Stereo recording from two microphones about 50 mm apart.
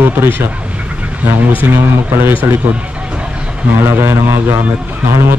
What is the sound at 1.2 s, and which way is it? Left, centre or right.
Speech, right.